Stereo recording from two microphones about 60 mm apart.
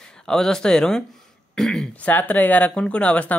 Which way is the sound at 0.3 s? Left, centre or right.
Centre.